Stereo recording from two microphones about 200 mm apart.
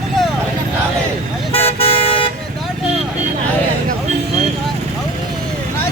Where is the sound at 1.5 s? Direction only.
30° left (ahead or behind).